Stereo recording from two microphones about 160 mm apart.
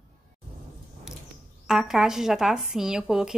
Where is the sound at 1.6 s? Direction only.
Centre (ahead or behind).